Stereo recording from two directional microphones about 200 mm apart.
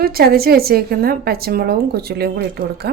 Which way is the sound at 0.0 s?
50° right (ahead or behind).